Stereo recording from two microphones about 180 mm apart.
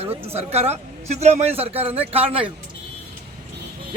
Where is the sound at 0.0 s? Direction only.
35° right (ahead or behind).